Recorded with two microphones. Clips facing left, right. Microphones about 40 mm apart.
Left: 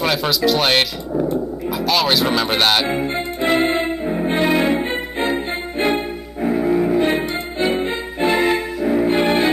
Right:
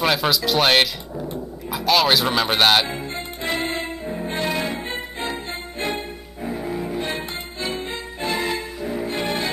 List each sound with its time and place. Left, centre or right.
0.0 s speech: centre
2.9 s music: left